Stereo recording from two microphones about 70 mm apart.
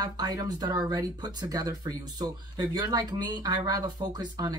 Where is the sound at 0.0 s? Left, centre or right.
Right.